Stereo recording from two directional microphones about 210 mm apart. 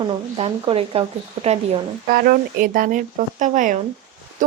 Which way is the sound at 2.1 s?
45° right (ahead or behind).